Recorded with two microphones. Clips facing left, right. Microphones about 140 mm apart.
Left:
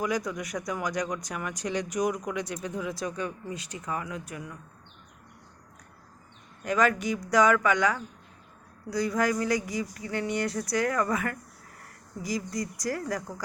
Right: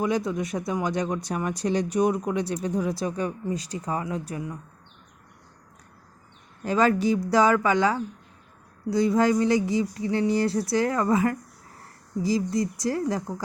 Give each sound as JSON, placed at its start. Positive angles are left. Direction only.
{"t": 0.0, "sound": "speech", "side_deg": -25}
{"t": 6.7, "sound": "speech", "side_deg": -30}